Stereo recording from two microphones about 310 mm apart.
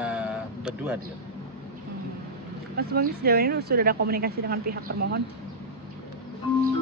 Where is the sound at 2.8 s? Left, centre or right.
Right.